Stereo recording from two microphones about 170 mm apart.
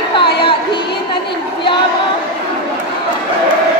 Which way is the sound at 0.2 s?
30° left (ahead or behind).